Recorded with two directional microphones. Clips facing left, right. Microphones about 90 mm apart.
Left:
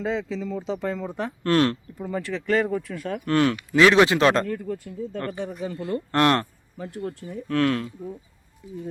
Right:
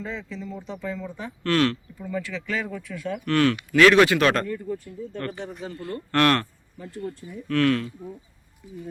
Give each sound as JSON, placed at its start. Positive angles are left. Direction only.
{"t": 0.0, "sound": "speech", "side_deg": 90}
{"t": 1.5, "sound": "speech", "side_deg": 25}
{"t": 2.0, "sound": "speech", "side_deg": 40}
{"t": 3.2, "sound": "speech", "side_deg": 25}
{"t": 4.4, "sound": "speech", "side_deg": 75}
{"t": 5.8, "sound": "speech", "side_deg": 20}